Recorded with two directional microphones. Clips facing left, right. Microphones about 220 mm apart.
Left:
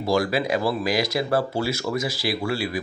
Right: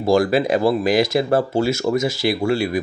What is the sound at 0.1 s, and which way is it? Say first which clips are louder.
Speech: right 6 dB; 50° right (ahead or behind).